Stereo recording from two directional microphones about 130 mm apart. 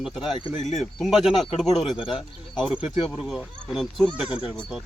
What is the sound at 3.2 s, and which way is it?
Speech, centre (ahead or behind).